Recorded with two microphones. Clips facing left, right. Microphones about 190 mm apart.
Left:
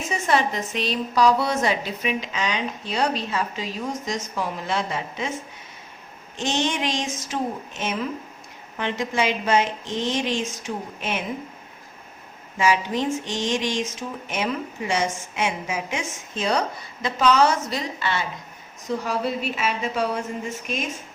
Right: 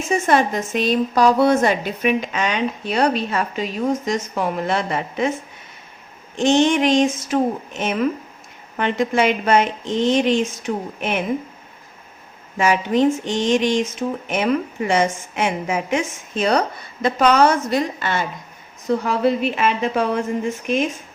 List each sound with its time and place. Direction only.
0.1 s a woman's voice: 50° right (ahead or behind)
6.3 s a woman's voice: 50° right (ahead or behind)
12.5 s a woman's voice: 60° right (ahead or behind)